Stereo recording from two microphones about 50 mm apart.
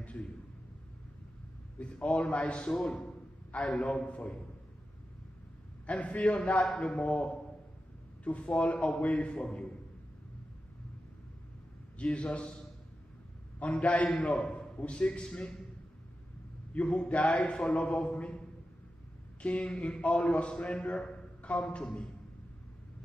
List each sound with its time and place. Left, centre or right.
0.0 s a sound: left
1.8 s a man's voice: left
2.7 s a man's voice: centre
3.5 s a man's voice: left
5.9 s a man's voice: left
12.0 s a man's voice: left
13.6 s a man's voice: left
16.7 s a man's voice: left
19.4 s a man's voice: left